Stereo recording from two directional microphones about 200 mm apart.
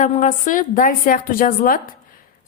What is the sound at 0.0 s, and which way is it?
A woman's voice, 40° left (ahead or behind).